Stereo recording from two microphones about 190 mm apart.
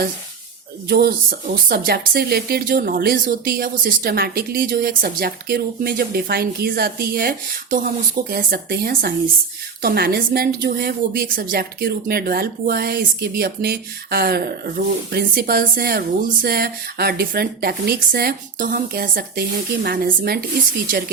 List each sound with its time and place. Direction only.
0.9 s a woman's voice: 55° right (ahead or behind)